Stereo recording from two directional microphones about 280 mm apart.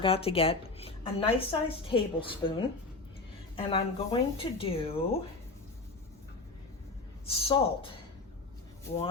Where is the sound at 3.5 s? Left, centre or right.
Centre.